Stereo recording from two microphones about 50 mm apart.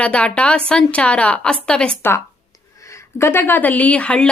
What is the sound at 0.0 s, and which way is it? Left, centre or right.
Speech, left.